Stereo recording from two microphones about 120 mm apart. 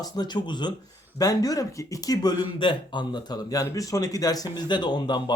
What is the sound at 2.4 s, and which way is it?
A man's voice, 40° left (ahead or behind).